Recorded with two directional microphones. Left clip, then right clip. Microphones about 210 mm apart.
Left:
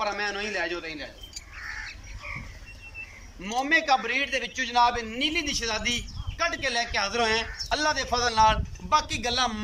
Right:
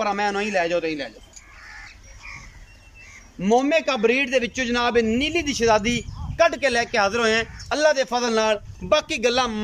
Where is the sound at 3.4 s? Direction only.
60° right (ahead or behind).